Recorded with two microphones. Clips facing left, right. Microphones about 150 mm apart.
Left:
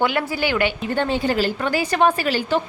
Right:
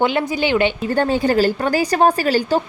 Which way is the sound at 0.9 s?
45° right (ahead or behind).